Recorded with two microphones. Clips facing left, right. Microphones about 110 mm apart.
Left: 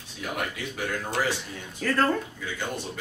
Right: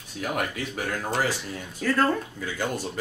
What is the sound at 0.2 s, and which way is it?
Speech, 55° right (ahead or behind).